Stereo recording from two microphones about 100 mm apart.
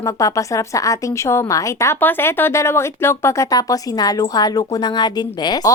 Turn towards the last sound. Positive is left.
turn(degrees=45)  # may be behind; listen again after turning